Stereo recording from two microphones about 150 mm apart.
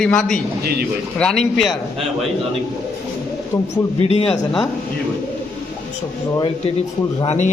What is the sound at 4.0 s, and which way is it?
Speech, 45° left (ahead or behind).